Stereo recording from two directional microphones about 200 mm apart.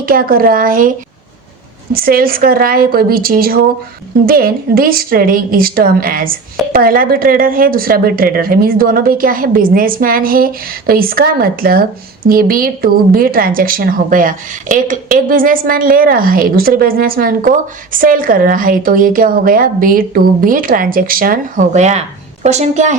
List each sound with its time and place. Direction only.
0.0 s a woman's voice: 45° right (ahead or behind)